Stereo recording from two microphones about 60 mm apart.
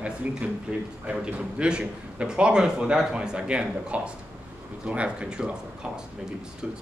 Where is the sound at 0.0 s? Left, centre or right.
Right.